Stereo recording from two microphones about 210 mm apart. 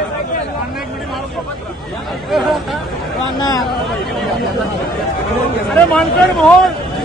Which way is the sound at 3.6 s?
Centre (ahead or behind).